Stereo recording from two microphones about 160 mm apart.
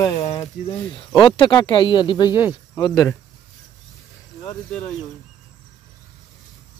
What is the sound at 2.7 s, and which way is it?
Cricket, 25° left (ahead or behind).